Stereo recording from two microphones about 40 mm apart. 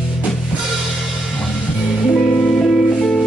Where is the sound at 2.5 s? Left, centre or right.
Centre.